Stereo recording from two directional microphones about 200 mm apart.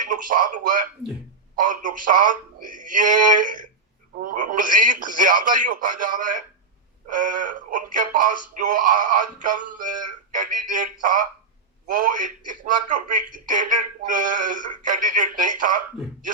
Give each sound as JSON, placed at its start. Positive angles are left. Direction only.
{"t": 0.1, "sound": "speech", "side_deg": -40}